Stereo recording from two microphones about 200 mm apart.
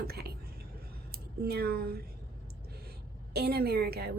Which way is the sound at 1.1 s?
50° right (ahead or behind).